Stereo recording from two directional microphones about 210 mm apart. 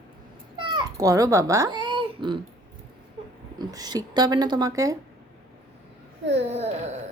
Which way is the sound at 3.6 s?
20° right (ahead or behind).